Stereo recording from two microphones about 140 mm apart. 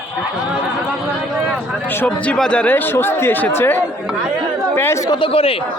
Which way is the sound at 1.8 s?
15° left (ahead or behind).